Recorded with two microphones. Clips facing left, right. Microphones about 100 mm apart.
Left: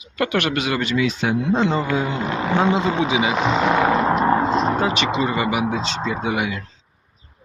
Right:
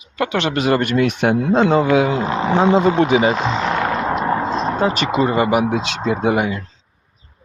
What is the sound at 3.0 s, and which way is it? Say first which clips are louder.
Speech: right 6 dB; 60° right (ahead or behind).